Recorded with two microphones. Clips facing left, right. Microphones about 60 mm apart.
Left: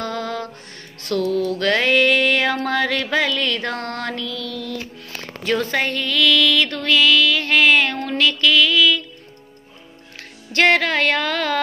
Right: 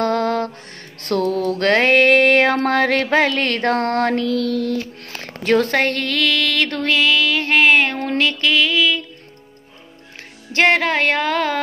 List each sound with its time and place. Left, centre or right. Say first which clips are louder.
0.0 s music: right 7 dB; right
1.0 s a sound: right 1 dB; right
6.2 s music: left 3 dB; right
10.5 s music: right 1 dB; right